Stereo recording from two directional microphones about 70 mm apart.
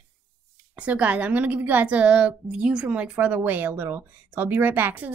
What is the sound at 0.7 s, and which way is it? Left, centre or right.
A woman's voice, centre.